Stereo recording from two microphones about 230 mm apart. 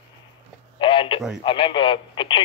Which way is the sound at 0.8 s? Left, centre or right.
Left.